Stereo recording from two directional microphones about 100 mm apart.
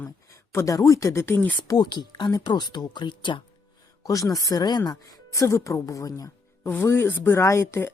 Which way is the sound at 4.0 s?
35° left (ahead or behind).